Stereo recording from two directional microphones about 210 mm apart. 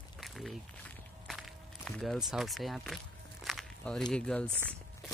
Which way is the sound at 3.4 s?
Centre (ahead or behind).